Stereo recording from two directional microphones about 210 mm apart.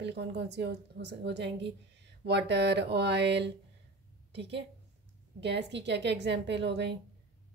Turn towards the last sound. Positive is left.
turn(degrees=-55)  # may be behind; listen again after turning